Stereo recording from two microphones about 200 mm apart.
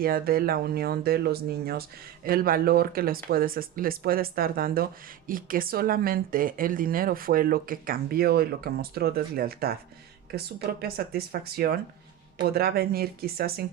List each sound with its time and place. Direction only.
0.0 s speech: 50° right (ahead or behind)